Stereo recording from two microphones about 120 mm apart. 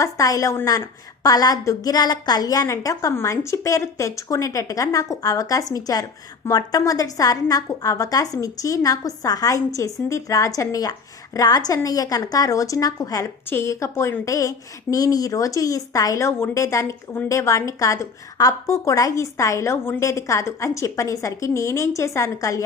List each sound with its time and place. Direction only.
0.0 s a woman's voice: 30° left (ahead or behind)